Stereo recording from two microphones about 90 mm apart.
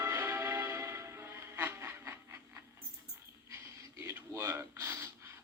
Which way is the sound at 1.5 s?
25° right (ahead or behind).